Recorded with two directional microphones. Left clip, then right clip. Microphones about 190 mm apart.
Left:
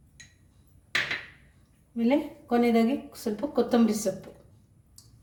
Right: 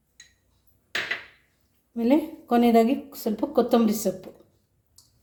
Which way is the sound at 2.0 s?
55° right (ahead or behind).